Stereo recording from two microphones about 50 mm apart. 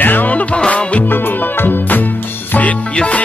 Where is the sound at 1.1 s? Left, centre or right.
Left.